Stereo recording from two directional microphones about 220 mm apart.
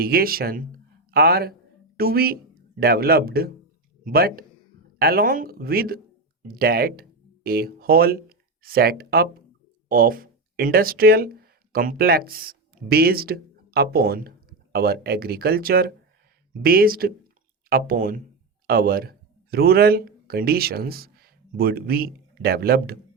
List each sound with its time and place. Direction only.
0.0 s speech: 45° right (ahead or behind)